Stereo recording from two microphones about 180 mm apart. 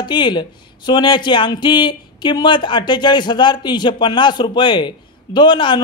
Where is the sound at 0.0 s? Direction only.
25° left (ahead or behind).